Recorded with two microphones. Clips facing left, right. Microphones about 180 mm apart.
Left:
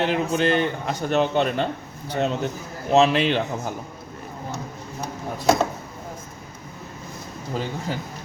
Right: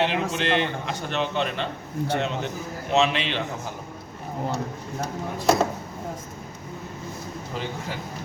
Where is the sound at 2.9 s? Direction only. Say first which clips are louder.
Left 5 dB; 40° left (ahead or behind).